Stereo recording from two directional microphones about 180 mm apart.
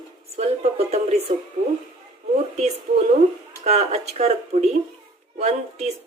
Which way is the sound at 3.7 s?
35° right (ahead or behind).